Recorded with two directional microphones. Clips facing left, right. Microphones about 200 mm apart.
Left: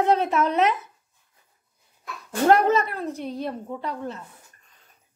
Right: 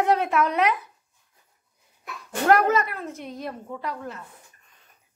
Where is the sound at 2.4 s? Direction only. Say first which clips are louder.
Left 1 dB; 25° left (ahead or behind).